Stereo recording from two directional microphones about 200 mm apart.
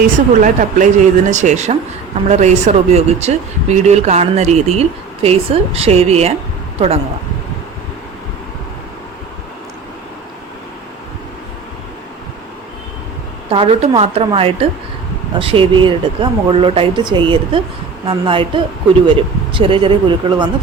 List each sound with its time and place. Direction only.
0.4 s speech: 40° right (ahead or behind)
13.5 s speech: 30° right (ahead or behind)